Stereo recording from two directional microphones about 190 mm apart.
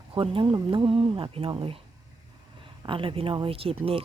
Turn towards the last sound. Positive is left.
turn(degrees=-30)  # may be behind; listen again after turning